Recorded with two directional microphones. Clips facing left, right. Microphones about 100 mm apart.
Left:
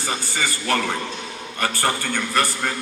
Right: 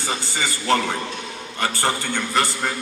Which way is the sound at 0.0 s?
20° right (ahead or behind).